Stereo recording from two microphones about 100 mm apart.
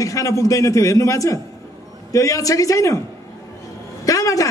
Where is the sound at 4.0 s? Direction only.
35° left (ahead or behind).